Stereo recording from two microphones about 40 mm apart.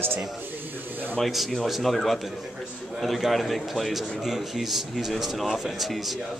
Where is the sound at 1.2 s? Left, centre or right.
Centre.